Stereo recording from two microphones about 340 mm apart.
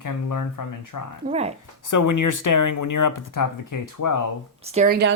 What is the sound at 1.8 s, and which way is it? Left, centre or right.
Speech, left.